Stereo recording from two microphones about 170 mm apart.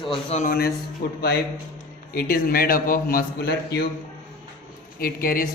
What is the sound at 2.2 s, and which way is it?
A man's voice, 55° left (ahead or behind).